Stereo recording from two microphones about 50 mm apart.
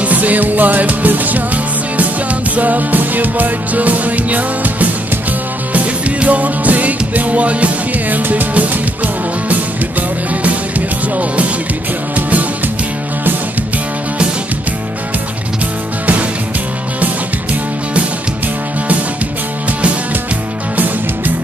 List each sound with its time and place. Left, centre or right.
0.0 s music: right
11.1 s music: right